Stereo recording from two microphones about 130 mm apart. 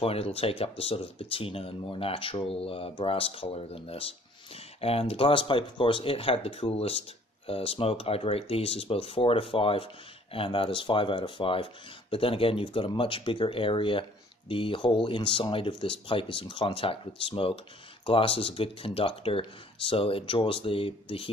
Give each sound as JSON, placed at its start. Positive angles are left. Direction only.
{"t": 0.0, "sound": "speech", "side_deg": 50}